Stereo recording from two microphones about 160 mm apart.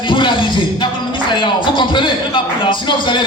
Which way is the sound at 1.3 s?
30° left (ahead or behind).